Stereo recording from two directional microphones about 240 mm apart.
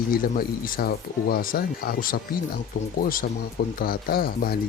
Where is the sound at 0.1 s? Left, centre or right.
Left.